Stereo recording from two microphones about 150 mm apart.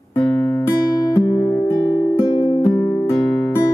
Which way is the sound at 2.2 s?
25° left (ahead or behind).